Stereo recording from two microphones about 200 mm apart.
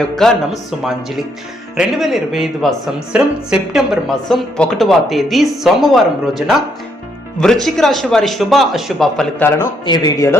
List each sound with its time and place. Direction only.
0.0 s speech: centre (ahead or behind)
9.8 s speech: 20° left (ahead or behind)